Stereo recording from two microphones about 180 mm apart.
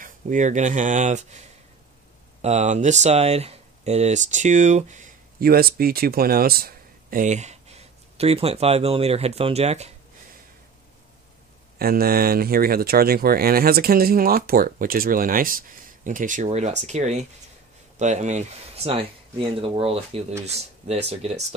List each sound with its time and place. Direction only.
0.0 s speech: 45° right (ahead or behind)
2.4 s speech: 40° right (ahead or behind)
11.8 s speech: 55° right (ahead or behind); by 21.5 s 35° right (ahead or behind)